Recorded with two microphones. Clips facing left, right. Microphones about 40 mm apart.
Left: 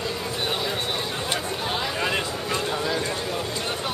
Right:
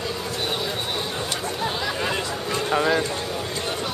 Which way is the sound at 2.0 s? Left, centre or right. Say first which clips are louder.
Even; centre.